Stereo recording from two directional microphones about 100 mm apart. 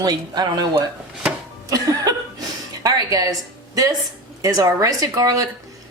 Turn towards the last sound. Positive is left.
turn(degrees=-35)  # may be behind; listen again after turning